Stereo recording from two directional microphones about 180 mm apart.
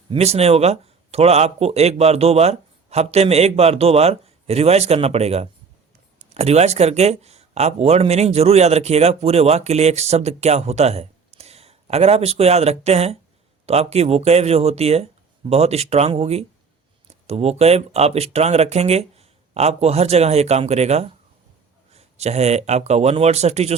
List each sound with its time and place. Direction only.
0.1 s speech: 35° right (ahead or behind)